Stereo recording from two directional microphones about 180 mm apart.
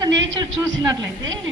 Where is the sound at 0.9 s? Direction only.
20° right (ahead or behind).